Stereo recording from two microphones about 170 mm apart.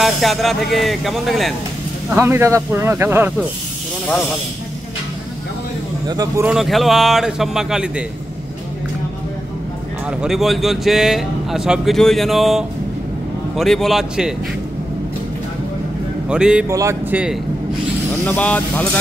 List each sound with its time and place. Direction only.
0.0 s speech: centre (ahead or behind)
2.0 s speech: 15° right (ahead or behind)
6.0 s speech: 20° right (ahead or behind)
6.4 s speech: centre (ahead or behind)
10.2 s speech: centre (ahead or behind)
16.3 s speech: 5° right (ahead or behind)
16.6 s speech: 15° right (ahead or behind)
18.2 s speech: 10° left (ahead or behind)